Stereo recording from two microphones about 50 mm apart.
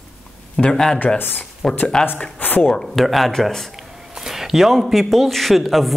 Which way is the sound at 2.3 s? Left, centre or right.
Left.